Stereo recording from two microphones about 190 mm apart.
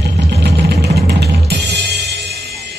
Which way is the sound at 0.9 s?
60° right (ahead or behind).